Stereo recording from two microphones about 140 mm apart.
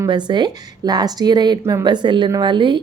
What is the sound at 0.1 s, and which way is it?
A woman's voice, 30° right (ahead or behind).